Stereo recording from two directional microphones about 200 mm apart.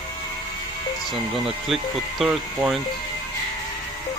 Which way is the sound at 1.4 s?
Centre (ahead or behind).